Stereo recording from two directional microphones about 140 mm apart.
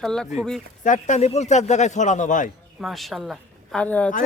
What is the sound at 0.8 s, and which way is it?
Speech, 65° left (ahead or behind).